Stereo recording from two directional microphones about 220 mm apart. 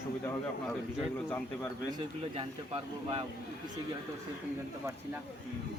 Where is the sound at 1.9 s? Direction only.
20° right (ahead or behind).